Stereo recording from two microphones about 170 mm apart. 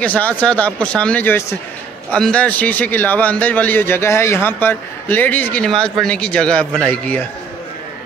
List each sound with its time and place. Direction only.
0.0 s a man's voice: 10° left (ahead or behind)